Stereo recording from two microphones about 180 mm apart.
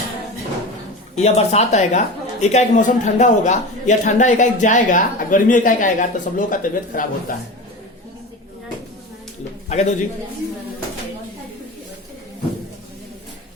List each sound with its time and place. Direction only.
1.1 s a woman's voice: 35° left (ahead or behind)
9.6 s a man's voice: 40° left (ahead or behind)